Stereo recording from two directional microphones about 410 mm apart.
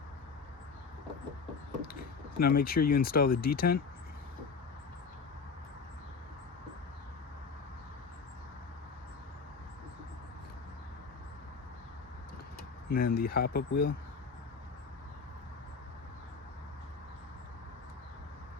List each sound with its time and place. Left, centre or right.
1.9 s speech: left
12.9 s speech: left